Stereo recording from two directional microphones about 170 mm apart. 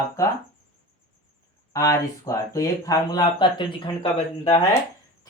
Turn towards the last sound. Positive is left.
turn(degrees=30)  # may be behind; listen again after turning